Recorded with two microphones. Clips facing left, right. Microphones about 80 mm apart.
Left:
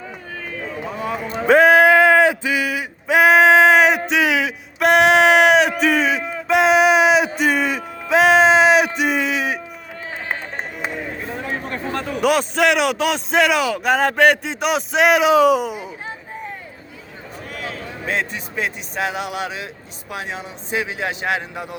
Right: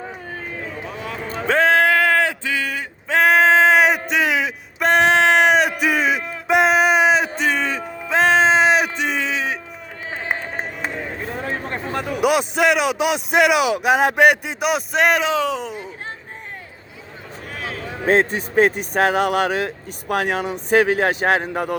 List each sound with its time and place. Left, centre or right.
1.4 s a sound: centre
11.7 s a man's voice: centre
15.3 s speech: centre
17.6 s a man's voice: right